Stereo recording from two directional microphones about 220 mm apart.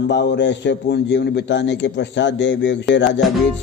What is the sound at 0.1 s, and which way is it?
A man's voice, 50° left (ahead or behind).